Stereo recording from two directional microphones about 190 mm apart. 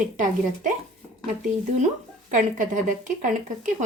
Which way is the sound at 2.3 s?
45° right (ahead or behind).